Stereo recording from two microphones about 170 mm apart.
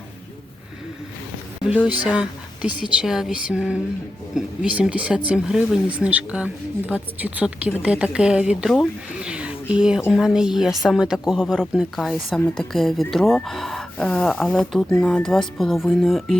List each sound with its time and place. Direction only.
1.6 s speech: 5° right (ahead or behind)